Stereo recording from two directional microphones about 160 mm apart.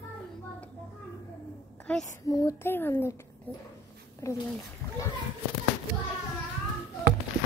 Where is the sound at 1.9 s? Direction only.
10° left (ahead or behind).